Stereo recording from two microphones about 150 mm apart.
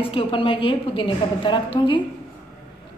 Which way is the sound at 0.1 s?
35° left (ahead or behind).